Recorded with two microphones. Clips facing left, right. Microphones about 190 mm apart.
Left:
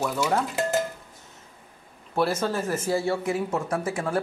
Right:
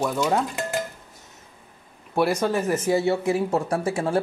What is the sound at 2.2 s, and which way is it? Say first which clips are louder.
Speech: right 3 dB; 15° right (ahead or behind).